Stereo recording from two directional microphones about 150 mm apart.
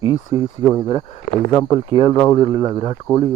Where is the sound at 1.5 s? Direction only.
25° left (ahead or behind).